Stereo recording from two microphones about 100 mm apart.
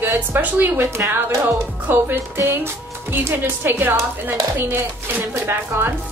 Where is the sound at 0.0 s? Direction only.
20° right (ahead or behind).